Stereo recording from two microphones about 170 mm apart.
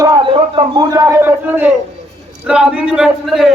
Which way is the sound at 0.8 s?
20° right (ahead or behind).